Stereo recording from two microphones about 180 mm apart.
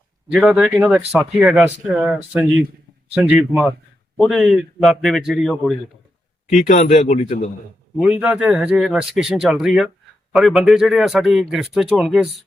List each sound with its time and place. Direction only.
0.3 s a man's voice: 5° right (ahead or behind)
6.5 s a man's voice: 45° left (ahead or behind)
7.9 s a man's voice: 5° right (ahead or behind)